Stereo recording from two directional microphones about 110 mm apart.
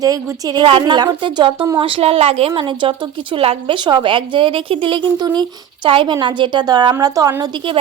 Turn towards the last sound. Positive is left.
turn(degrees=-35)  # may be behind; listen again after turning